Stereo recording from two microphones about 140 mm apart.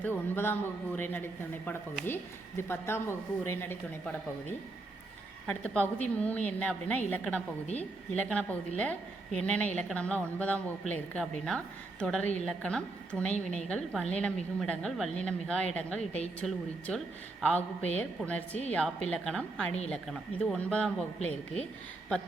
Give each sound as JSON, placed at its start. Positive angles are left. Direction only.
{"t": 0.0, "sound": "a woman's voice", "side_deg": 15}
{"t": 5.5, "sound": "a woman's voice", "side_deg": 10}